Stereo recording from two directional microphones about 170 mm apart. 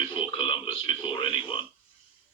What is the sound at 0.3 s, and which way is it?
Radio, 30° left (ahead or behind).